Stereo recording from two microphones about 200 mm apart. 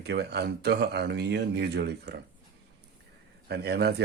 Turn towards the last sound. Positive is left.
turn(degrees=-55)  # may be behind; listen again after turning